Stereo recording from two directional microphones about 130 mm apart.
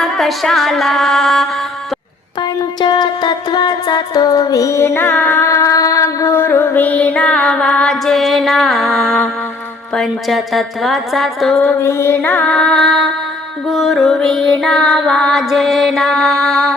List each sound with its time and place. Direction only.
0.0 s music: centre (ahead or behind)
2.8 s music: 35° left (ahead or behind); by 11.7 s centre (ahead or behind)
11.8 s music: 20° left (ahead or behind); by 16.7 s centre (ahead or behind)